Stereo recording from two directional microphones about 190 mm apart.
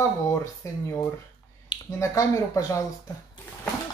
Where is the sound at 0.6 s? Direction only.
15° left (ahead or behind).